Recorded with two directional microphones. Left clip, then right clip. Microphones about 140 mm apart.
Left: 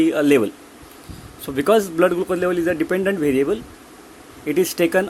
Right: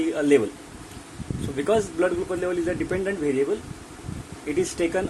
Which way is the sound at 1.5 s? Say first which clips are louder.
Left 6 dB; 70° left (ahead or behind).